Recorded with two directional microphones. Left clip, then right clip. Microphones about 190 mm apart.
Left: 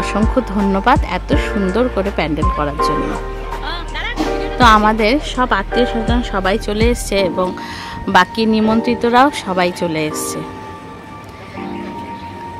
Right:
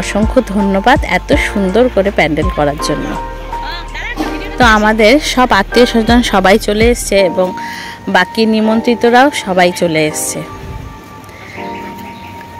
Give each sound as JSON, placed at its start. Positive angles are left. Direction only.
{"t": 0.0, "sound": "a woman's voice", "side_deg": -10}
{"t": 3.6, "sound": "music", "side_deg": 15}
{"t": 4.6, "sound": "a woman's voice", "side_deg": -10}
{"t": 6.6, "sound": "a woman's voice", "side_deg": -15}